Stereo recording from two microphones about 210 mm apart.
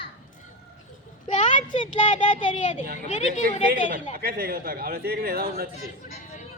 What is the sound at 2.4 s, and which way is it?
Speech, 35° left (ahead or behind).